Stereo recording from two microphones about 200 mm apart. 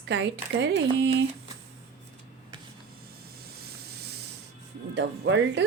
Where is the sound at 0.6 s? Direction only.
60° right (ahead or behind).